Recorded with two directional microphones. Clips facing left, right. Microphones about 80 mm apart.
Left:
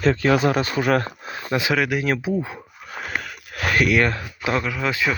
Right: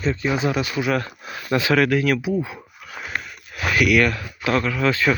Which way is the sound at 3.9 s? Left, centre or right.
Left.